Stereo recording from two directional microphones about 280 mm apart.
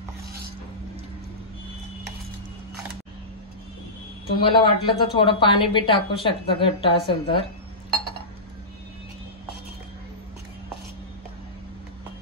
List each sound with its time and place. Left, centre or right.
4.5 s speech: centre